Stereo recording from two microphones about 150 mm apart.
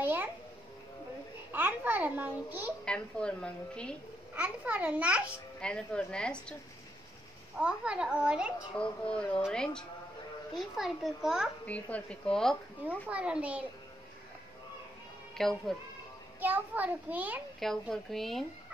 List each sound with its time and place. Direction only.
0.0 s babbling: 10° right (ahead or behind)
1.5 s a child's voice: 10° right (ahead or behind)
2.8 s a woman's voice: 5° left (ahead or behind)
4.4 s a child's voice: 10° right (ahead or behind)
5.6 s speech: 5° left (ahead or behind)
7.5 s a child's voice: 5° right (ahead or behind)
8.7 s a woman's voice: 5° left (ahead or behind)
11.6 s speech: 10° left (ahead or behind)
13.1 s a child's voice: 10° right (ahead or behind)
15.3 s speech: 5° left (ahead or behind)
16.3 s a child's voice: 10° right (ahead or behind)
17.6 s a woman's voice: centre (ahead or behind)